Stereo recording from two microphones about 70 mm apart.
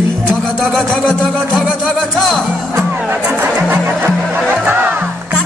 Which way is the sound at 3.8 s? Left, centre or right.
Right.